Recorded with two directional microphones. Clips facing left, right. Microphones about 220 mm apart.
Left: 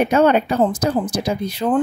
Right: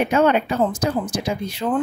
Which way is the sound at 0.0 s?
40° left (ahead or behind).